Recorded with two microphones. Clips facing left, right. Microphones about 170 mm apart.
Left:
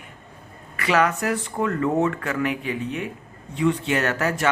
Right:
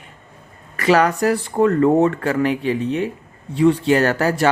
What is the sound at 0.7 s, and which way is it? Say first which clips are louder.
Speech: right 5 dB; 40° right (ahead or behind).